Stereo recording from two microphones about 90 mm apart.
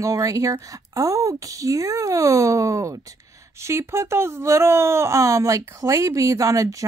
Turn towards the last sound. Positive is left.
turn(degrees=-40)  # may be behind; listen again after turning